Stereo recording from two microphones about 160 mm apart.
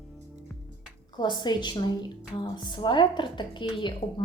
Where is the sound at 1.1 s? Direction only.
25° left (ahead or behind).